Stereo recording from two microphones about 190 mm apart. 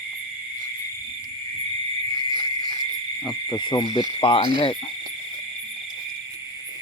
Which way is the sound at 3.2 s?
25° left (ahead or behind).